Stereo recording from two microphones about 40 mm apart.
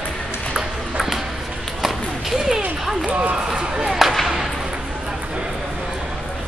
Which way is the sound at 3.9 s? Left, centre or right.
Centre.